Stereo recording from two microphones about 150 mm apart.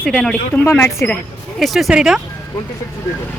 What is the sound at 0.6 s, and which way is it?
Speech, 15° left (ahead or behind).